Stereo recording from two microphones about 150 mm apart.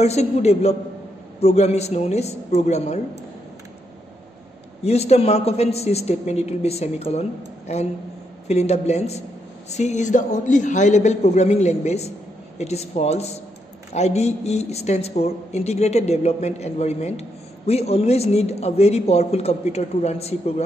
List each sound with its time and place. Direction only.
0.0 s a man's voice: 45° left (ahead or behind)
4.8 s a man's voice: 45° left (ahead or behind)